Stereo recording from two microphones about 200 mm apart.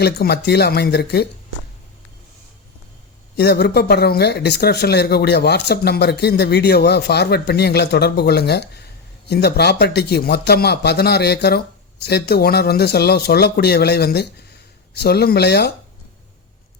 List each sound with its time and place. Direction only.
0.0 s speech: 55° left (ahead or behind)
3.3 s speech: 55° left (ahead or behind)